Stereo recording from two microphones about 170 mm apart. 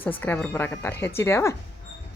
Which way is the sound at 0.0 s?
10° left (ahead or behind).